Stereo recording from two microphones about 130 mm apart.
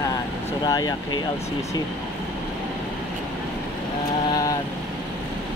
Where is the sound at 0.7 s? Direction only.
30° left (ahead or behind).